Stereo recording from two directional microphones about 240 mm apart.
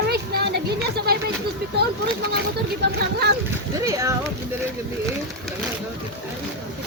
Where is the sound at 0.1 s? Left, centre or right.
Right.